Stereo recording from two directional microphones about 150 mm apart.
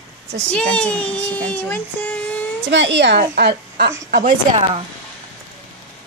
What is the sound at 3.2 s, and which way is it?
Speech, 90° right.